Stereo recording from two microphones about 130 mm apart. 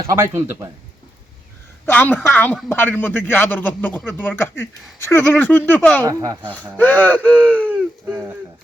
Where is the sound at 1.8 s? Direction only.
15° left (ahead or behind).